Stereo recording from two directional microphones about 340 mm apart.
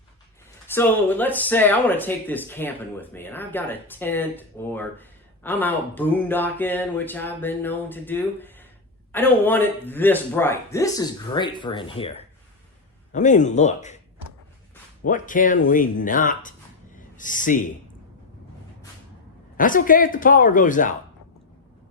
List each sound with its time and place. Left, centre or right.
0.7 s speech: centre
15.0 s speech: left
19.5 s speech: left